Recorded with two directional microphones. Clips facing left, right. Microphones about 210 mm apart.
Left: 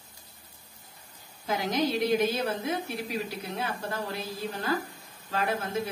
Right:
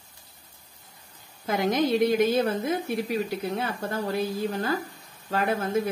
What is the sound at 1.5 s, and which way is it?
A woman's voice, 55° right (ahead or behind).